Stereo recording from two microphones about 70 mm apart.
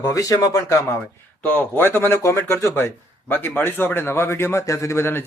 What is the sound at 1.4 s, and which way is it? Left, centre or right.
Speech, left.